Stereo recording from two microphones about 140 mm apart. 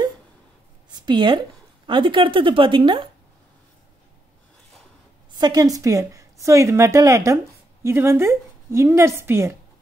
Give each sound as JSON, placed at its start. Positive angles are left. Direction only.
{"t": 0.9, "sound": "a woman's voice", "side_deg": -35}
{"t": 5.3, "sound": "a woman's voice", "side_deg": -30}